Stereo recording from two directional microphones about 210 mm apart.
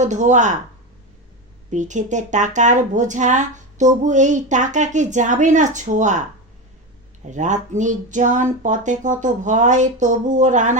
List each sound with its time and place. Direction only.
0.0 s speech: 35° right (ahead or behind)
1.7 s speech: 35° right (ahead or behind)
7.3 s speech: 35° right (ahead or behind)